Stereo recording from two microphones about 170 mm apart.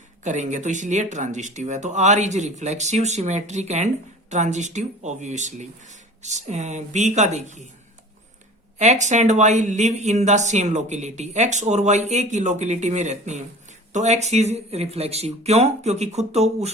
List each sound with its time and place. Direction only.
0.3 s speech: 45° right (ahead or behind)
8.8 s speech: 45° right (ahead or behind)